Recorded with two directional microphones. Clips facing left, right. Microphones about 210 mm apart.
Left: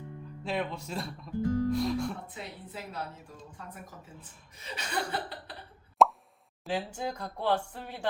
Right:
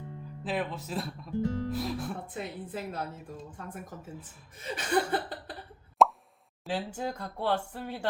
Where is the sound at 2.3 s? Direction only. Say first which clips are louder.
Right 6 dB; 50° right (ahead or behind).